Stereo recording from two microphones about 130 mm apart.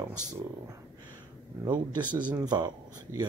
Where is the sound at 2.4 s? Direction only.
30° right (ahead or behind).